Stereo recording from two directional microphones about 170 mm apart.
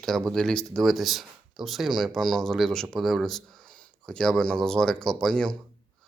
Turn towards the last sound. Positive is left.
turn(degrees=5)  # may be behind; listen again after turning